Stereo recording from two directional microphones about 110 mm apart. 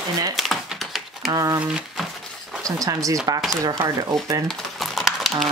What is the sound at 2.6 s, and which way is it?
Speech, 30° right (ahead or behind).